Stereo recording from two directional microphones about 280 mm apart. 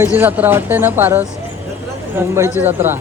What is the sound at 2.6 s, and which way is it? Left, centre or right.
Speech, centre.